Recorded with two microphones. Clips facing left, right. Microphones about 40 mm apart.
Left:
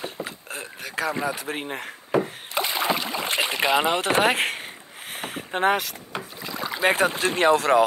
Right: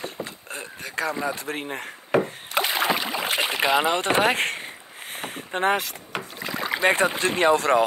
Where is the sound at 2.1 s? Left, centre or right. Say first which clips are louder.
Right 1 dB; right.